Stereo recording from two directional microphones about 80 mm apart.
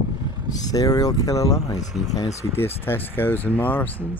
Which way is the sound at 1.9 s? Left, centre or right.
Centre.